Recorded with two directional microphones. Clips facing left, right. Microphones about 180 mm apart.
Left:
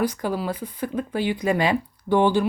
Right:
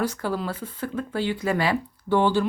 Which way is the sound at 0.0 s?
15° left (ahead or behind).